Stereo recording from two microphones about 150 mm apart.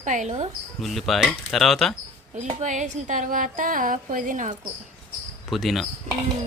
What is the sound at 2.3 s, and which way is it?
A woman's voice, 50° right (ahead or behind).